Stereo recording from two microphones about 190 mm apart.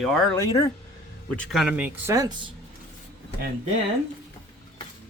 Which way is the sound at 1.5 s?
5° right (ahead or behind).